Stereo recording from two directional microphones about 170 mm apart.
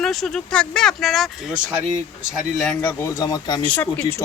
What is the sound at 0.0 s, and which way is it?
Speech, centre (ahead or behind).